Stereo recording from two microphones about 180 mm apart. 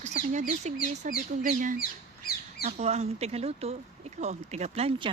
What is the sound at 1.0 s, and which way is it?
Speech, 45° right (ahead or behind).